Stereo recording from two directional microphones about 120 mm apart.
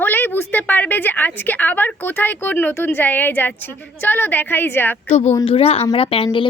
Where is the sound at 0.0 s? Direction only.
15° left (ahead or behind).